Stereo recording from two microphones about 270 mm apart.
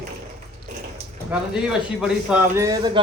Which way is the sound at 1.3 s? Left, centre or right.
Centre.